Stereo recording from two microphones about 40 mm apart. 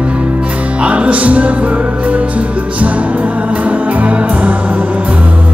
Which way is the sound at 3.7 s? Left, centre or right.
Right.